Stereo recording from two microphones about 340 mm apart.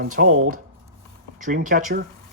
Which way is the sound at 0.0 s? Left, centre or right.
Right.